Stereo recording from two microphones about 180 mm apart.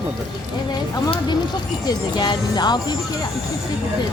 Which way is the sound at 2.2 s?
25° left (ahead or behind).